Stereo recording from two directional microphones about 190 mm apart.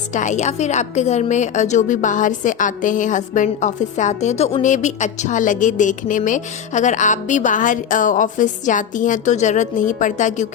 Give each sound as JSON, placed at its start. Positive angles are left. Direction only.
{"t": 0.1, "sound": "a woman's voice", "side_deg": 40}